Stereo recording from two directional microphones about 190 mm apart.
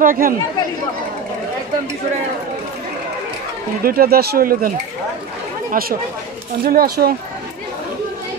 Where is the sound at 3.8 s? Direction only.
50° right (ahead or behind).